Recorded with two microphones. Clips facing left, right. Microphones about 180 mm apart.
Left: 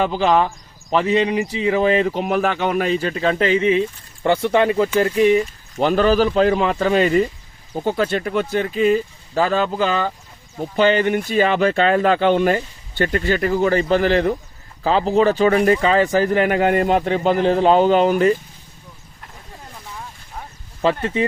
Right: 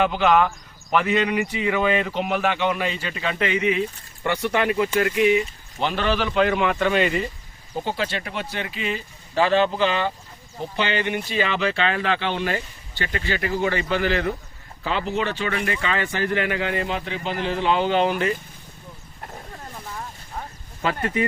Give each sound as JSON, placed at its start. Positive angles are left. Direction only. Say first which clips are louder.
{"t": 0.0, "sound": "speech", "louder": "left 2 dB", "side_deg": 35}
{"t": 20.8, "sound": "speech", "louder": "left 5 dB", "side_deg": 25}